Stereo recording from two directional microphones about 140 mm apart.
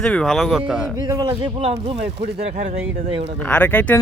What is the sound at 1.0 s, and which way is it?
Speech, 30° right (ahead or behind).